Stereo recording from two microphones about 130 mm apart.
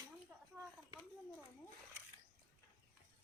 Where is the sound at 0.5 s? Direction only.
5° right (ahead or behind).